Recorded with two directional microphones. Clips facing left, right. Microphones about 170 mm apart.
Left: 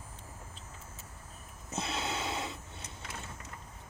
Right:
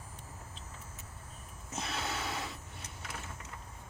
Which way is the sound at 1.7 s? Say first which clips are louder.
Left 2 dB; 25° left (ahead or behind).